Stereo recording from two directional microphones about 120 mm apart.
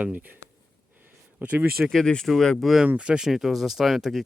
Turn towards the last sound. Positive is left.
turn(degrees=0)  # may be behind; listen again after turning